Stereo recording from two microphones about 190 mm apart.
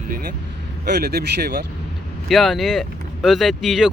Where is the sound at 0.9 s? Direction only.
55° right (ahead or behind).